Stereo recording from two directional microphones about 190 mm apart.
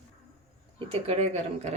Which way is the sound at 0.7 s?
35° right (ahead or behind).